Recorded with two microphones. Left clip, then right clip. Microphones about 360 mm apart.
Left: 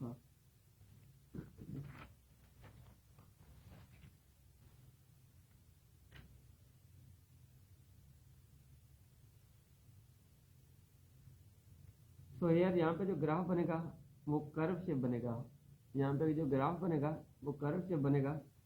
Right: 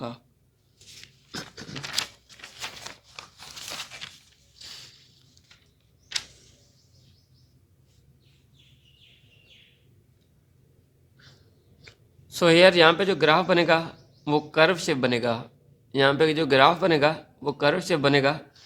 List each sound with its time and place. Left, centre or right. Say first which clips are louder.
12.4 s a man's voice: right 19 dB; right